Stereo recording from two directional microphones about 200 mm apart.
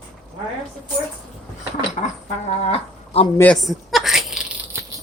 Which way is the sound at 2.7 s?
30° left (ahead or behind).